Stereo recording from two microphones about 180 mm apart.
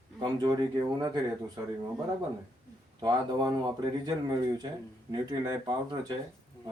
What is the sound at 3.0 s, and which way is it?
Speech, 25° right (ahead or behind).